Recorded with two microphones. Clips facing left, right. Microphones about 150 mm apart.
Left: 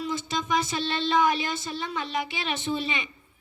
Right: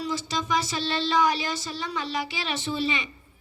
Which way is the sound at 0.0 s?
55° left (ahead or behind).